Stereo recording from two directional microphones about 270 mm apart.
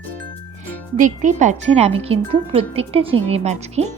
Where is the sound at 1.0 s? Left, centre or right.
Right.